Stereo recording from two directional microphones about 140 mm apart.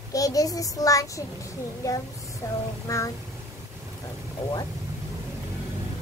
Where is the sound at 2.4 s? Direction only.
25° left (ahead or behind).